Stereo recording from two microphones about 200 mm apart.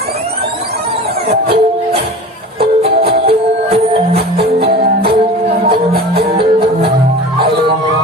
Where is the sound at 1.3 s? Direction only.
30° right (ahead or behind).